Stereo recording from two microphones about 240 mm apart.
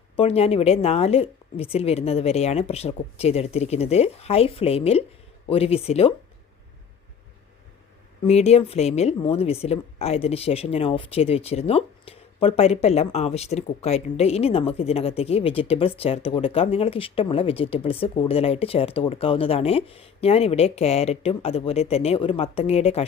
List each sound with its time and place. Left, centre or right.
0.2 s speech: left
8.3 s speech: left